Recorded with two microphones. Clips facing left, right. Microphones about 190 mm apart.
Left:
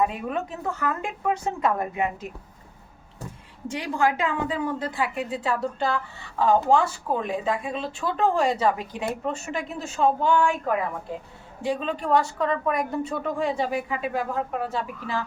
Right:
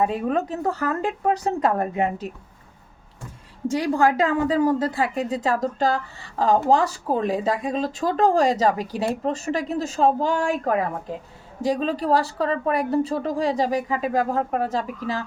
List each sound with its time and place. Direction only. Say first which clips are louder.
0.0 s speech: right 4 dB; 35° right (ahead or behind)
3.7 s speech: right 5 dB; 40° right (ahead or behind)